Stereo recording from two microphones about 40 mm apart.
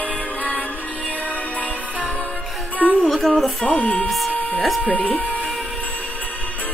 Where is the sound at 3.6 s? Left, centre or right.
Left.